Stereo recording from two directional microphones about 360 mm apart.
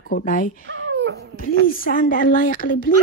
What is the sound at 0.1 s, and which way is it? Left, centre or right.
Speech, left.